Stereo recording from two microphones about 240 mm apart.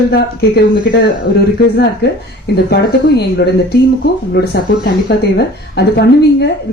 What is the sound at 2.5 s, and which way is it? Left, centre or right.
A woman's voice, left.